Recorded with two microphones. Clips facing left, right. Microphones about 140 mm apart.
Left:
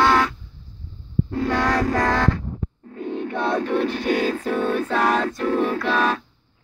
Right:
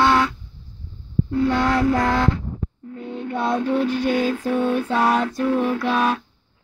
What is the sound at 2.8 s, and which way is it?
Music, 40° left (ahead or behind).